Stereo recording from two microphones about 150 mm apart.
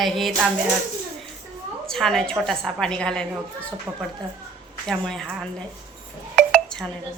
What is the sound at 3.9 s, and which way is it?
Speech, 15° right (ahead or behind).